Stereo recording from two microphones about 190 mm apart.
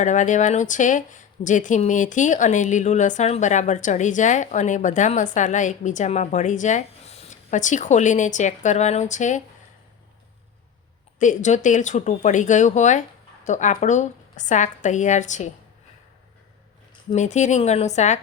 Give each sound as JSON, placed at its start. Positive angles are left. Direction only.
{"t": 0.0, "sound": "speech", "side_deg": 40}
{"t": 11.2, "sound": "speech", "side_deg": 40}
{"t": 17.2, "sound": "speech", "side_deg": 40}